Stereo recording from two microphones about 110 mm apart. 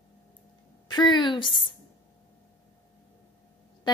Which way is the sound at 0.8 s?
45° left (ahead or behind).